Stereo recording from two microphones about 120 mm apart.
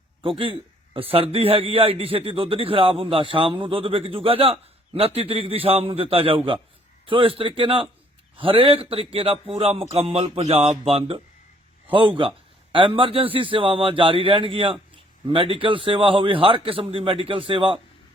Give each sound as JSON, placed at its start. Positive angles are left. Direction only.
{"t": 0.2, "sound": "a man's voice", "side_deg": -45}